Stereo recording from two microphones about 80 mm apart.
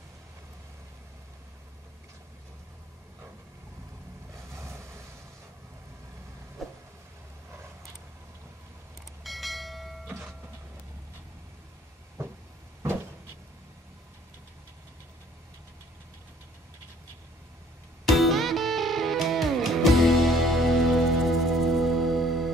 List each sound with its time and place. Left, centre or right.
4.3 s vehicle: right
6.6 s vehicle: centre
9.2 s train: centre
18.0 s music: centre